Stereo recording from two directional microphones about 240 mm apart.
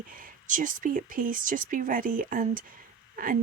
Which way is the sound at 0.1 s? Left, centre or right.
Right.